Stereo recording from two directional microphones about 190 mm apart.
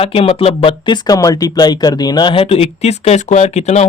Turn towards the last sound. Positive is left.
turn(degrees=35)  # may be behind; listen again after turning